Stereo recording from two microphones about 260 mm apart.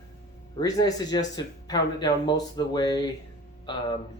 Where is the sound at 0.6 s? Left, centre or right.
Centre.